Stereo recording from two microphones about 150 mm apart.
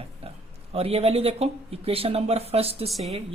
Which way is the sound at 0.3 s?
40° right (ahead or behind).